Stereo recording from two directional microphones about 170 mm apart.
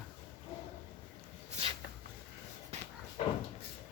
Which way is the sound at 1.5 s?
40° right (ahead or behind).